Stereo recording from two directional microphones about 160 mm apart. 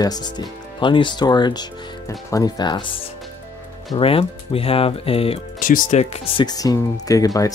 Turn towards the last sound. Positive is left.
turn(degrees=20)  # may be behind; listen again after turning